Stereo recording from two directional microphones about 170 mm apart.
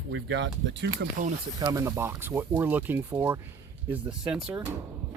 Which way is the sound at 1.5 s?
20° right (ahead or behind).